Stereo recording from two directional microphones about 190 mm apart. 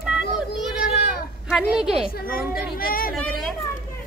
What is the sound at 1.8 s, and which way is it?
Speech, 5° right (ahead or behind).